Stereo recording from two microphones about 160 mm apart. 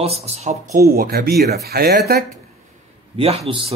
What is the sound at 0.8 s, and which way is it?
Speech, 70° right (ahead or behind).